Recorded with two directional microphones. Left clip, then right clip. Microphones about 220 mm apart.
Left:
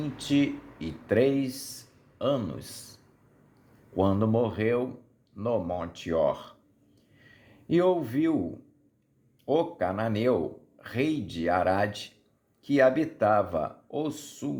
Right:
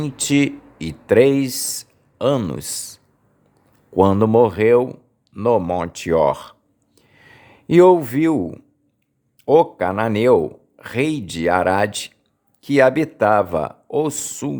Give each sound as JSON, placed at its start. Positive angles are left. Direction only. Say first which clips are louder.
{"t": 0.0, "sound": "speech", "louder": "right 8 dB", "side_deg": -40}
{"t": 3.9, "sound": "speech", "louder": "right 12 dB", "side_deg": -40}